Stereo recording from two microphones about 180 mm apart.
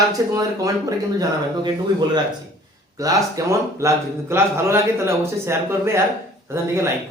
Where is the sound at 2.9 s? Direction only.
20° right (ahead or behind).